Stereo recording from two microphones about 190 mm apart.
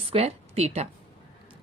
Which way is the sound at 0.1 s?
35° right (ahead or behind).